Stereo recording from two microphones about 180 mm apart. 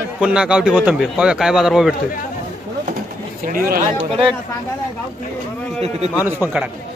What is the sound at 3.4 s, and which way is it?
Speech, 55° right (ahead or behind).